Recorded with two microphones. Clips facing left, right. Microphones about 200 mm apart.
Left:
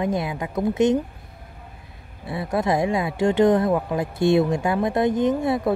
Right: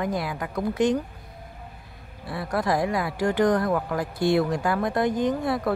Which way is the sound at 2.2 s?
20° left (ahead or behind).